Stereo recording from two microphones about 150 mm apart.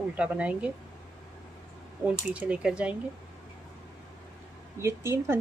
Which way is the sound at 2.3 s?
10° right (ahead or behind).